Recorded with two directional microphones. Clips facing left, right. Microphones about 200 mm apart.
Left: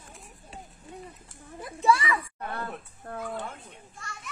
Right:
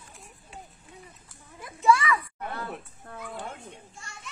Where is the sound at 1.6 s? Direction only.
35° left (ahead or behind).